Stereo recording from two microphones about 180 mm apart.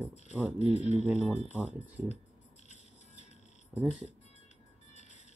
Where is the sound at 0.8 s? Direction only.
35° left (ahead or behind).